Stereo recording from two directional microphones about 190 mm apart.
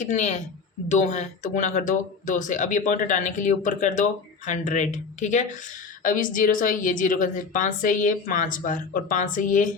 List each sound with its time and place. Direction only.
0.0 s a woman's voice: 40° left (ahead or behind)